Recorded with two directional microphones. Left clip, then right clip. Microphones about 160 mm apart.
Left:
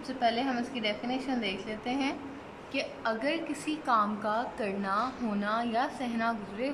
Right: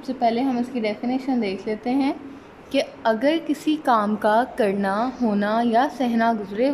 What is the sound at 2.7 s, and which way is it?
A woman's voice, 45° right (ahead or behind).